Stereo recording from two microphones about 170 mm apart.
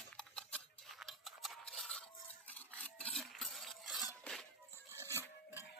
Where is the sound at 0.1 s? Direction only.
5° left (ahead or behind).